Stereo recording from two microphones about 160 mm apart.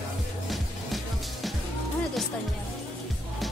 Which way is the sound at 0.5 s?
Centre (ahead or behind).